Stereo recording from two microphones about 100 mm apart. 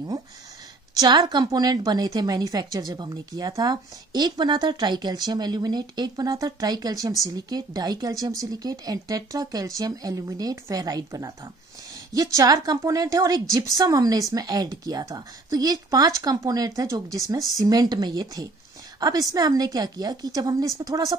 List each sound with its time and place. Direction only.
0.9 s a woman's voice: 45° right (ahead or behind)